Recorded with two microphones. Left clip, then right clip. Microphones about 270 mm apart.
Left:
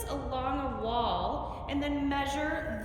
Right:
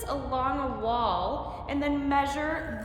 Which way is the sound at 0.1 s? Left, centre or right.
Right.